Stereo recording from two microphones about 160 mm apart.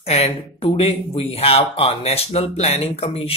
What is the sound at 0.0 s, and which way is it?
Speech, 40° left (ahead or behind).